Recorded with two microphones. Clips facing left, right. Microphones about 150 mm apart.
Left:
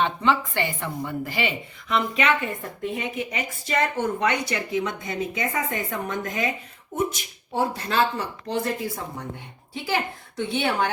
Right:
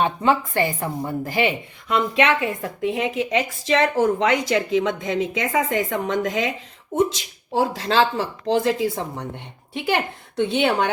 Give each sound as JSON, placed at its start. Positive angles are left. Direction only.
{"t": 0.0, "sound": "a woman's voice", "side_deg": -45}
{"t": 2.1, "sound": "a woman's voice", "side_deg": -75}
{"t": 9.3, "sound": "speech", "side_deg": -65}